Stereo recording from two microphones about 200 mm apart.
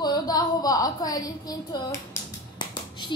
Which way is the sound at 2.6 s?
20° left (ahead or behind).